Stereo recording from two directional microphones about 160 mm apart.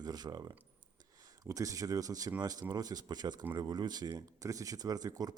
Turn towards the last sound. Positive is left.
turn(degrees=-25)  # may be behind; listen again after turning